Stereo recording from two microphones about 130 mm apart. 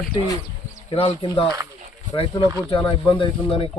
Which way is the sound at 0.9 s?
50° left (ahead or behind).